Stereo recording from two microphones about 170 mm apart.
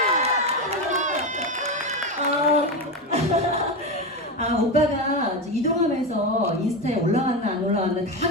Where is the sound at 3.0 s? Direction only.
40° right (ahead or behind).